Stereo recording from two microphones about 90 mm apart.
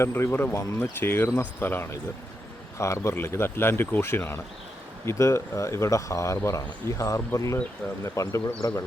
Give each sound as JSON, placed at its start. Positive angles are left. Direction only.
{"t": 0.0, "sound": "speech", "side_deg": 25}